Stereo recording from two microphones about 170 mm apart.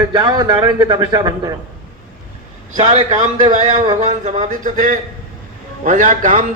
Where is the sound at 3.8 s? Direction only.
40° right (ahead or behind).